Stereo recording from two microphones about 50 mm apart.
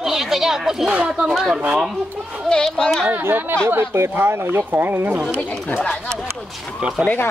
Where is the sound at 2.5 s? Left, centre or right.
Centre.